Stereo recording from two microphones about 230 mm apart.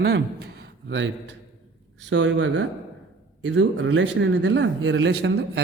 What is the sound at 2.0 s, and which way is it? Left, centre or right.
Speech, right.